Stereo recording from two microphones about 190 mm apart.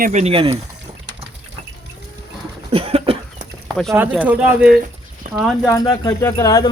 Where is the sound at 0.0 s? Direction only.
35° right (ahead or behind).